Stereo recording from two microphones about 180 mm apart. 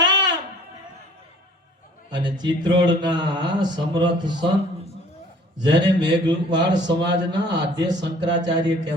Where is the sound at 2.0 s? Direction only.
25° right (ahead or behind).